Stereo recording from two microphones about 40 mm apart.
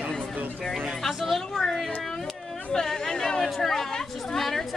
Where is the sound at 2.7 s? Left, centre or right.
Centre.